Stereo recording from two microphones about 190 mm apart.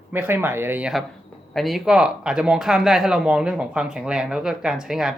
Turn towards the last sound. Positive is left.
turn(degrees=0)  # may be behind; listen again after turning